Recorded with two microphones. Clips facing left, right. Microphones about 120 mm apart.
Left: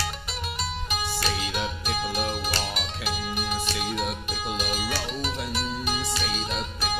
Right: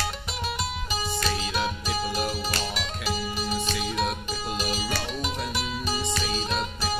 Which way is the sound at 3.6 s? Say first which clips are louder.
Right 1 dB; centre (ahead or behind).